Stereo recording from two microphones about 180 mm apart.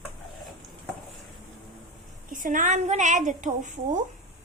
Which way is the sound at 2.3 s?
45° right (ahead or behind).